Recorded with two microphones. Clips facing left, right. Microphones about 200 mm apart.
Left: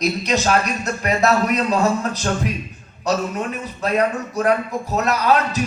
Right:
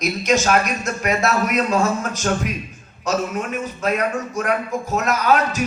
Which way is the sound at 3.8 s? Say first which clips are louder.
Left 3 dB; 35° left (ahead or behind).